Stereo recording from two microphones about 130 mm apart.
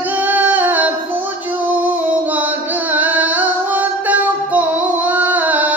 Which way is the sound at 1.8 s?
15° right (ahead or behind).